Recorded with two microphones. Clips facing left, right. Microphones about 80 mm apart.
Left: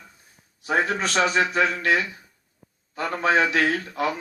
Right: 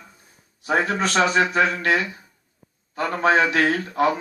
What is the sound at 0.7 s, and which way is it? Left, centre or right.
A man's voice, right.